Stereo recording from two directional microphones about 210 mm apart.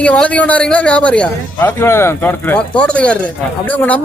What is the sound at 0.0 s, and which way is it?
A man's voice, 5° left (ahead or behind).